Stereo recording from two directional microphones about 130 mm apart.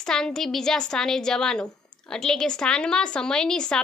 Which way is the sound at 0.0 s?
5° left (ahead or behind).